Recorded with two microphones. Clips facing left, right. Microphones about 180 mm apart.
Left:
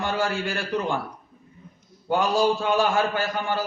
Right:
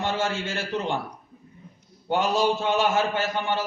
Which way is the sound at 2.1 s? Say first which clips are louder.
Left 1 dB; 20° right (ahead or behind).